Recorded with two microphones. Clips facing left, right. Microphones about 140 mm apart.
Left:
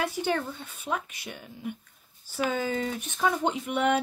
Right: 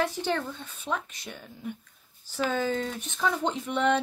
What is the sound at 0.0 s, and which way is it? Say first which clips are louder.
Speech: even; 10° left (ahead or behind).